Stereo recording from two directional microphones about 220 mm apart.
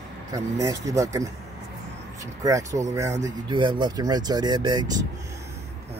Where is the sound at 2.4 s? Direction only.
15° right (ahead or behind).